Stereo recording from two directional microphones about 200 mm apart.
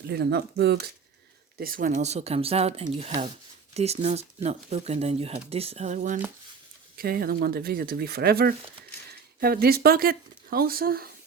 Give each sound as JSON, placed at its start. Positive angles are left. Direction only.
{"t": 0.1, "sound": "speech", "side_deg": -55}